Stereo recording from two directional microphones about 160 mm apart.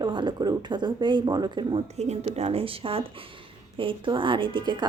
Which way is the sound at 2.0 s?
40° right (ahead or behind).